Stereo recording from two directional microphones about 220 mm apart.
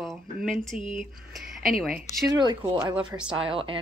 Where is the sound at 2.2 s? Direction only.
20° right (ahead or behind).